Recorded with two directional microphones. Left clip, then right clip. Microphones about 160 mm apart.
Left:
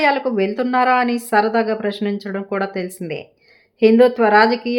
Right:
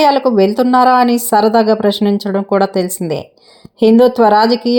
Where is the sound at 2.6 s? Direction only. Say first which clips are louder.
Right 9 dB; 10° right (ahead or behind).